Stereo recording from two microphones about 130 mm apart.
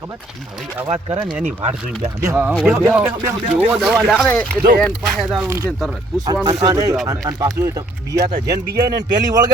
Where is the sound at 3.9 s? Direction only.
Centre (ahead or behind).